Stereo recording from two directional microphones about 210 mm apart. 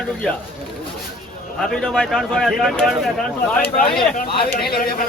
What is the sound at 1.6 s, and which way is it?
Speech, 5° left (ahead or behind).